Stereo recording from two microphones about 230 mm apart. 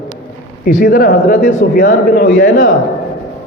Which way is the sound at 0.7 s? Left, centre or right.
Left.